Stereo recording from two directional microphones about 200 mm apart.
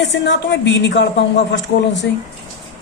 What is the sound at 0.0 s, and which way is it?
A woman's voice, 60° left (ahead or behind).